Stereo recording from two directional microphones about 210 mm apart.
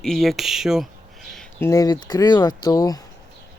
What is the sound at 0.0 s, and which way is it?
Speech, centre (ahead or behind).